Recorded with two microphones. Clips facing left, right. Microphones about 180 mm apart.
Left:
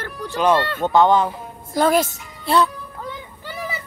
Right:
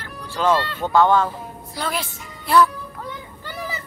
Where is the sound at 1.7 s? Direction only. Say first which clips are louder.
Left 11 dB; 45° left (ahead or behind).